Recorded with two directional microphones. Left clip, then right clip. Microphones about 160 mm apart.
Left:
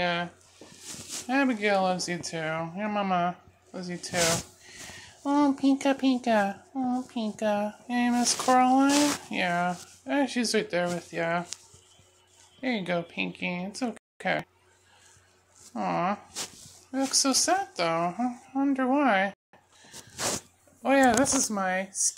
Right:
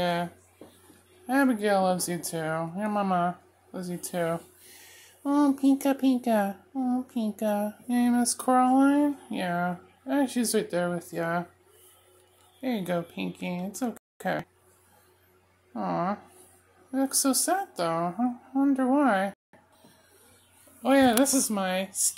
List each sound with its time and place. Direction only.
0.0 s speech: 10° right (ahead or behind)
5.2 s speech: 20° right (ahead or behind)
12.5 s speech: 10° right (ahead or behind)
15.7 s speech: 10° right (ahead or behind)
18.1 s speech: 5° left (ahead or behind)
18.6 s speech: 10° right (ahead or behind)
20.8 s speech: 5° right (ahead or behind)